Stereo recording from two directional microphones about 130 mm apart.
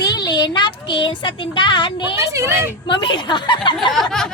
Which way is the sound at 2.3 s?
20° right (ahead or behind).